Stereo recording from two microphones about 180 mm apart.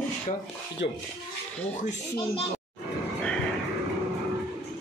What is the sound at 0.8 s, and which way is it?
Speech, 70° left (ahead or behind).